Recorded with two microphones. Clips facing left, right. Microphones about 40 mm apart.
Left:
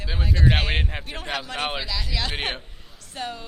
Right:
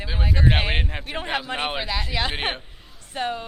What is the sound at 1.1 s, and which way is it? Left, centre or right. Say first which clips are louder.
A woman's voice: right 4 dB; right.